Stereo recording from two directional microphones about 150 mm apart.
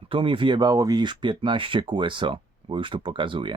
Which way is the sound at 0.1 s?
35° right (ahead or behind).